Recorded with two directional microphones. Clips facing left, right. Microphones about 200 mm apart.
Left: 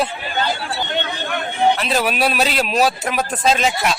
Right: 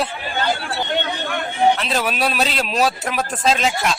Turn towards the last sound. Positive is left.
turn(degrees=5)  # may be behind; listen again after turning